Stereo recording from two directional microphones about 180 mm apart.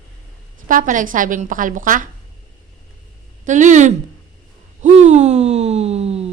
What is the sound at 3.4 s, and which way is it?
A woman's voice, 45° right (ahead or behind).